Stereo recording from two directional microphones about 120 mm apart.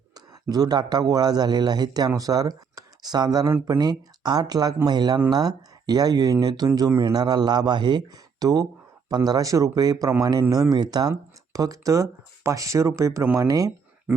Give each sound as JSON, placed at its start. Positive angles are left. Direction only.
{"t": 0.4, "sound": "a man's voice", "side_deg": -35}